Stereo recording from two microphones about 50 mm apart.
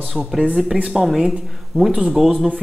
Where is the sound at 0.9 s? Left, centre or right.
Centre.